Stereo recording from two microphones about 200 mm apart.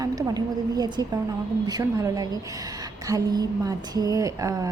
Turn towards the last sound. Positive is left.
turn(degrees=-15)  # may be behind; listen again after turning